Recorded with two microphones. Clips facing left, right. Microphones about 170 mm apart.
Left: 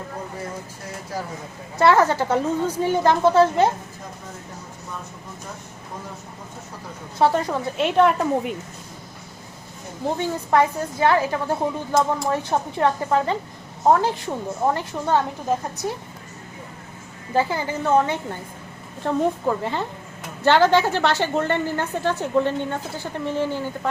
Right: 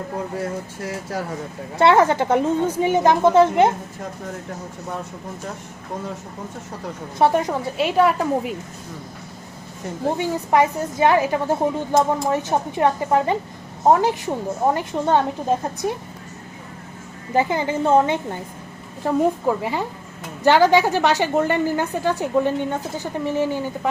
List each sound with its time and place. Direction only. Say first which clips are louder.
1.8 s a woman's voice: right 2 dB; 25° right (ahead or behind)
7.2 s a woman's voice: right 1 dB; 20° right (ahead or behind)
7.8 s a woman's voice: even; 5° right (ahead or behind)
10.2 s a woman's voice: right 1 dB; 15° right (ahead or behind)
17.3 s a woman's voice: right 2 dB; 20° right (ahead or behind)
19.0 s a woman's voice: right 2 dB; 10° right (ahead or behind)